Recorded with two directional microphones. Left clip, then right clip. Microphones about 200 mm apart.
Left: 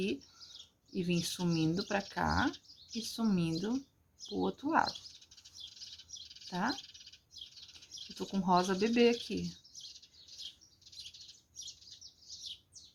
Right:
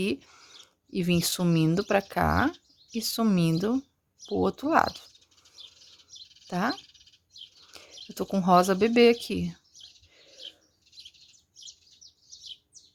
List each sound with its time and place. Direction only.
0.0 s speech: 55° right (ahead or behind)
6.2 s chirp: 10° right (ahead or behind)
6.5 s frog: 55° right (ahead or behind)
6.7 s bird: 5° right (ahead or behind)
8.3 s speech: 55° right (ahead or behind)